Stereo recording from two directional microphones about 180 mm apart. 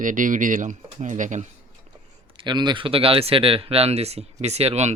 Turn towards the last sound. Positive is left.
turn(degrees=-35)  # may be behind; listen again after turning